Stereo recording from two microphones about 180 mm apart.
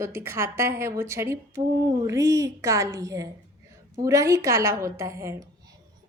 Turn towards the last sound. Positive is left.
turn(degrees=-15)  # may be behind; listen again after turning